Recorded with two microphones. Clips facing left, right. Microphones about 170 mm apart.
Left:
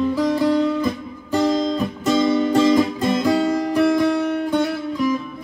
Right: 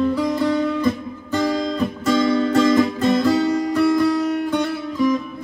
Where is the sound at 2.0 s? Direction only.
20° left (ahead or behind).